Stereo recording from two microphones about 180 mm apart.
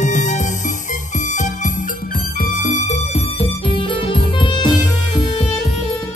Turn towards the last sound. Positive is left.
turn(degrees=25)  # may be behind; listen again after turning